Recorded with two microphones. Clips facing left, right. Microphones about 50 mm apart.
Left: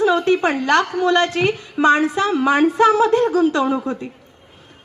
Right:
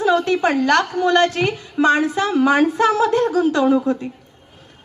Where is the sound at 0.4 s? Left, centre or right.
Left.